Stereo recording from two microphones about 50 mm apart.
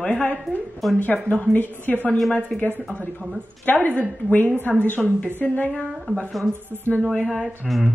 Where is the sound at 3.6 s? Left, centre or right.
Left.